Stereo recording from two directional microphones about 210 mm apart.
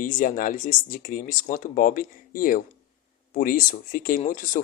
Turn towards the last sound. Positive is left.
turn(degrees=40)  # may be behind; listen again after turning